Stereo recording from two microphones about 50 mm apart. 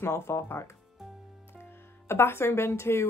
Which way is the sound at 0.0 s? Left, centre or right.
Left.